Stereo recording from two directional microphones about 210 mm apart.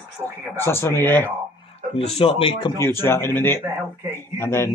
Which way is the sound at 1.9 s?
30° left (ahead or behind).